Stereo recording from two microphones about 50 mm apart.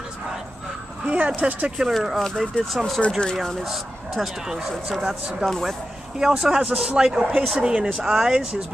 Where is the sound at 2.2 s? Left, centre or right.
Centre.